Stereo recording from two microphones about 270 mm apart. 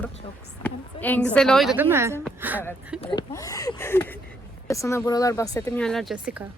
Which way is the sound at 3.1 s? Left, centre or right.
Centre.